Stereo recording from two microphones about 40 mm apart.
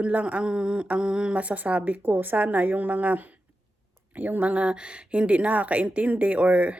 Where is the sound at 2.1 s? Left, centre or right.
Right.